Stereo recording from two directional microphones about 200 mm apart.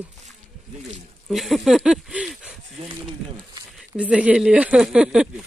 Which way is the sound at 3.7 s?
5° right (ahead or behind).